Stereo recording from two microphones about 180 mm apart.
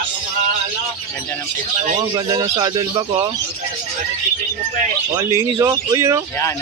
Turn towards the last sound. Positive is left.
turn(degrees=-15)  # may be behind; listen again after turning